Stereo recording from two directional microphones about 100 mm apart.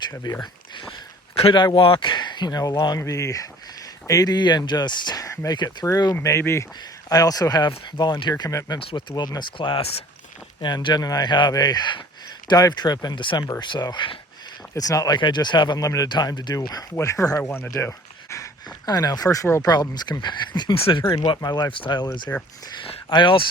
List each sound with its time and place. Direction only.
0.1 s speech: 40° left (ahead or behind)
0.4 s a sound: 50° left (ahead or behind)
1.5 s speech: 55° left (ahead or behind)
3.0 s speech: 30° left (ahead or behind)
6.1 s speech: 25° left (ahead or behind)
7.1 s speech: 40° left (ahead or behind)
8.8 s speech: 60° left (ahead or behind)
10.6 s speech: 50° left (ahead or behind)
14.8 s speech: 35° left (ahead or behind)
15.8 s speech: 35° left (ahead or behind)
16.0 s speech: 45° left (ahead or behind)
16.9 s speech: 30° left (ahead or behind); by 20.7 s 45° left (ahead or behind)
20.7 s speech: 65° left (ahead or behind)
21.0 s speech: 50° left (ahead or behind)